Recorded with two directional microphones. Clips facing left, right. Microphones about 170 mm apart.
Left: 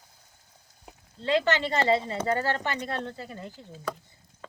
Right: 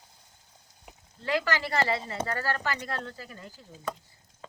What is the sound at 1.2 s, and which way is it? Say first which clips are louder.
Speech: left 4 dB; 25° left (ahead or behind).